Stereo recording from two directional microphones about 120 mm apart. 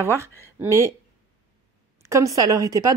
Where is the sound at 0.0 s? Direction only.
20° right (ahead or behind).